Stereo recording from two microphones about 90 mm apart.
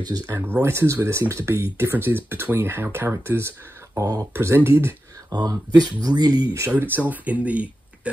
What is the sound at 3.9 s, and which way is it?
Speech, 45° right (ahead or behind).